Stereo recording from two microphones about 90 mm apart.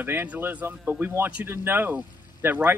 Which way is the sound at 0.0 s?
25° right (ahead or behind).